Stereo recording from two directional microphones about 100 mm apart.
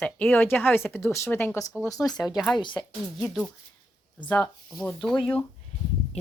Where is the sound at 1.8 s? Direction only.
35° left (ahead or behind).